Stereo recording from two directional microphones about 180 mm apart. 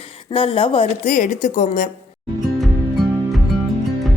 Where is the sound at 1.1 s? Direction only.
45° left (ahead or behind).